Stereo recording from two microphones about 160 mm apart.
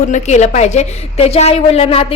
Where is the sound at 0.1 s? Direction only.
45° left (ahead or behind).